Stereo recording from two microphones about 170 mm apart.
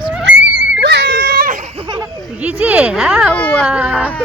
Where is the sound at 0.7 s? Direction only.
85° right; by 1.7 s 55° right (ahead or behind).